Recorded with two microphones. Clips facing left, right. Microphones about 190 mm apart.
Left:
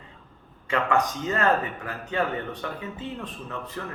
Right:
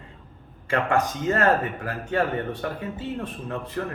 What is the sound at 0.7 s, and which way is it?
Speech, 50° right (ahead or behind).